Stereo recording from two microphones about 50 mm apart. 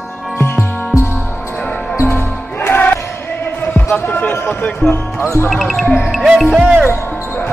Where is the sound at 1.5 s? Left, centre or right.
Centre.